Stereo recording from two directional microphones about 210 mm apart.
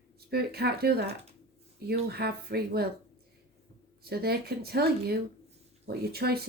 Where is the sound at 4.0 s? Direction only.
50° right (ahead or behind).